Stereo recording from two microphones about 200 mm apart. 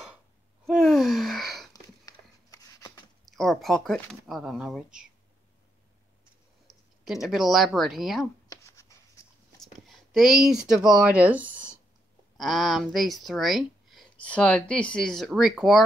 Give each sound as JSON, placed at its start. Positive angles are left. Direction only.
{"t": 0.7, "sound": "gasp", "side_deg": 0}
{"t": 1.7, "sound": "a sound", "side_deg": 20}
{"t": 3.3, "sound": "speech", "side_deg": 0}
{"t": 6.7, "sound": "speech", "side_deg": 0}
{"t": 8.5, "sound": "writing", "side_deg": 15}
{"t": 9.6, "sound": "speech", "side_deg": 0}